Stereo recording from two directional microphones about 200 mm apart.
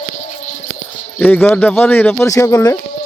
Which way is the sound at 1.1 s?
10° left (ahead or behind).